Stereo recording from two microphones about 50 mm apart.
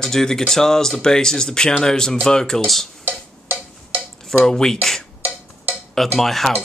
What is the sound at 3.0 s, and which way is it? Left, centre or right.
Percussion, right.